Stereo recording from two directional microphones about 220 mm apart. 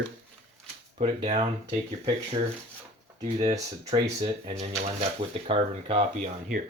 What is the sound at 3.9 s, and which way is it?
Speech, 25° right (ahead or behind).